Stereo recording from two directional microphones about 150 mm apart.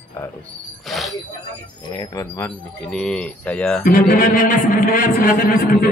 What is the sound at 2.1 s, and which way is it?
Speech, 20° left (ahead or behind).